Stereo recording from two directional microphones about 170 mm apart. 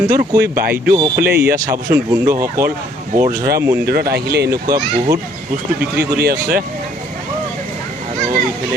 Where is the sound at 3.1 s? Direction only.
55° right (ahead or behind).